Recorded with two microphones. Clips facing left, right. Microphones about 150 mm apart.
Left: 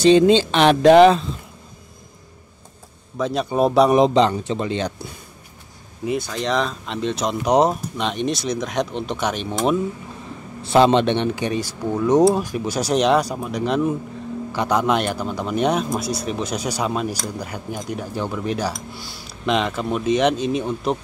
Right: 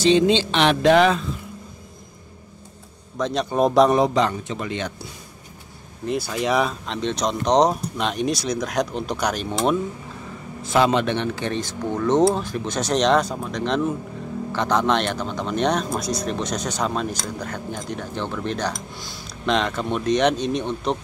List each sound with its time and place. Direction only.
0.0 s speech: 45° left (ahead or behind)
3.2 s speech: 5° left (ahead or behind)
3.9 s speech: 25° left (ahead or behind)
6.0 s speech: 5° right (ahead or behind)
6.9 s speech: centre (ahead or behind)
10.7 s speech: 25° left (ahead or behind); by 21.0 s 5° left (ahead or behind)